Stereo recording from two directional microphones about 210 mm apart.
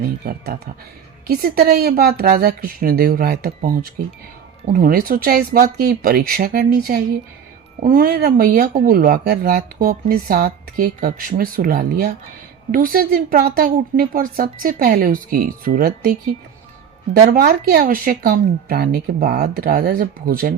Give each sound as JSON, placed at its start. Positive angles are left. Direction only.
{"t": 0.3, "sound": "a woman's voice", "side_deg": -45}
{"t": 17.3, "sound": "a woman's voice", "side_deg": -50}